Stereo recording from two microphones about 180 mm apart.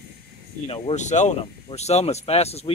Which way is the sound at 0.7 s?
40° left (ahead or behind).